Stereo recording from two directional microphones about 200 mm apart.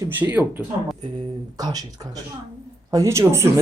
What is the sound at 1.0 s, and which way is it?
A man's voice, 20° right (ahead or behind).